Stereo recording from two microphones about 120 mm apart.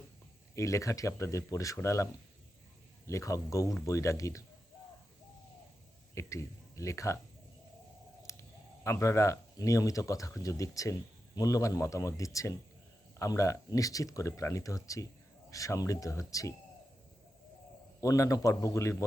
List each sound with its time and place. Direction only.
0.5 s speech: 25° left (ahead or behind)
3.1 s speech: 25° left (ahead or behind)
6.1 s speech: 25° left (ahead or behind)
8.2 s speech: 25° left (ahead or behind)
18.0 s speech: 25° left (ahead or behind)